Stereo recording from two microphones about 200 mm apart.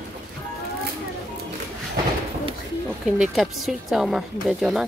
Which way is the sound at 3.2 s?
Centre (ahead or behind).